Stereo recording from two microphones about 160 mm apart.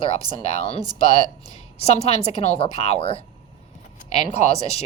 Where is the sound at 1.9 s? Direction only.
40° left (ahead or behind).